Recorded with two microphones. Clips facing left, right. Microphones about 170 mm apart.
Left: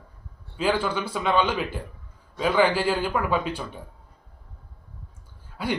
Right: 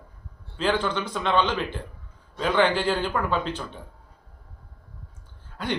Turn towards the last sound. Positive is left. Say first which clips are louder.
# left 1 dB
turn(degrees=10)  # may be behind; listen again after turning